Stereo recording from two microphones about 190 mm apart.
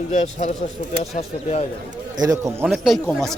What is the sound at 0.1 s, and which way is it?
Speech, 40° left (ahead or behind).